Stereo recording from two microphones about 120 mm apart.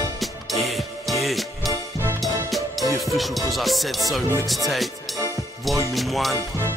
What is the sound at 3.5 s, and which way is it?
Speech, centre (ahead or behind).